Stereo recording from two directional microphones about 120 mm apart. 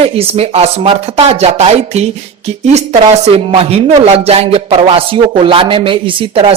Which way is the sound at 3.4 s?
55° right (ahead or behind).